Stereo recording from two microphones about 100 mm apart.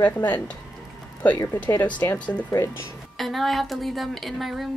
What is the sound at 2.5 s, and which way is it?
Speech, 25° left (ahead or behind).